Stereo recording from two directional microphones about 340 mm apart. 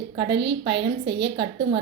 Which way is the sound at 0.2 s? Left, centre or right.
Right.